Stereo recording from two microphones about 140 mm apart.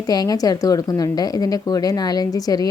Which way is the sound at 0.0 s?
25° left (ahead or behind).